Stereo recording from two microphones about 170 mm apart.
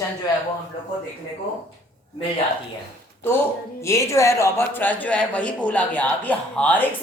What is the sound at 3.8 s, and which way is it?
A man's voice, 15° left (ahead or behind).